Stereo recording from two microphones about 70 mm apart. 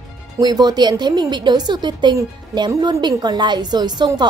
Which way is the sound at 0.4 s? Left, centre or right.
Right.